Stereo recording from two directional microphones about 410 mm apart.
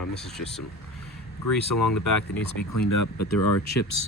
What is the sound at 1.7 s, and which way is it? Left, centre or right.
Speech, left.